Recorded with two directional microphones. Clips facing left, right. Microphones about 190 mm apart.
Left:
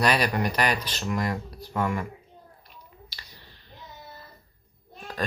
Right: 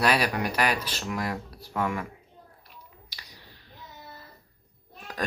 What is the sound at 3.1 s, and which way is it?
Finger snapping, 15° right (ahead or behind).